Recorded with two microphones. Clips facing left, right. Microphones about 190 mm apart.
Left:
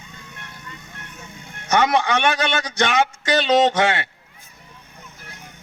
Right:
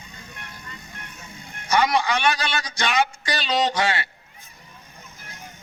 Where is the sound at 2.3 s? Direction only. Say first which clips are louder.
Left 5 dB; 55° left (ahead or behind).